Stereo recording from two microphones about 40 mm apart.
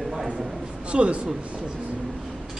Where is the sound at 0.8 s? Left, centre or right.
Right.